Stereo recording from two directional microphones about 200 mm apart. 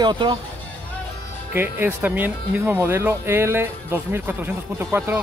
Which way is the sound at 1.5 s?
10° right (ahead or behind).